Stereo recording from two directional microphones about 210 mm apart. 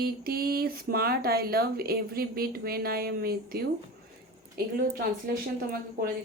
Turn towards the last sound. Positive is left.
turn(degrees=-45)  # may be behind; listen again after turning